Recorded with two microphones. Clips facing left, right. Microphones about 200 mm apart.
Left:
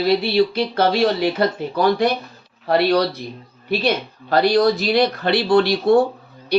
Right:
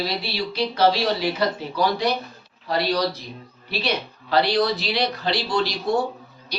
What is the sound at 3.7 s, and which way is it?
Speech, 50° left (ahead or behind).